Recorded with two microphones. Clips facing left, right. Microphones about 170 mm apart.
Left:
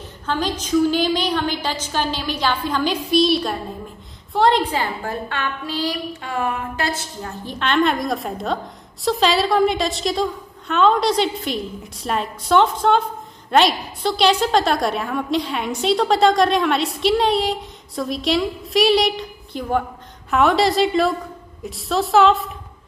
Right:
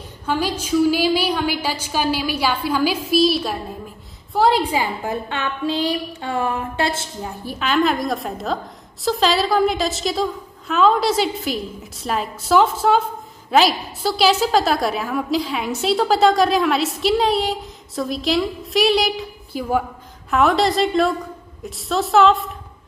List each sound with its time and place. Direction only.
0.3 s a woman's voice: 10° right (ahead or behind); by 7.1 s 25° right (ahead or behind)
7.2 s a woman's voice: 10° right (ahead or behind)